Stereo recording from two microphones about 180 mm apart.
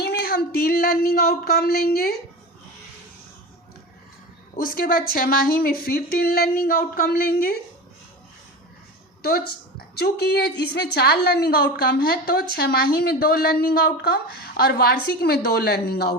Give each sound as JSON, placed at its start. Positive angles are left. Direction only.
{"t": 0.0, "sound": "a woman's voice", "side_deg": 60}
{"t": 4.5, "sound": "a woman's voice", "side_deg": 50}
{"t": 9.2, "sound": "a woman's voice", "side_deg": 60}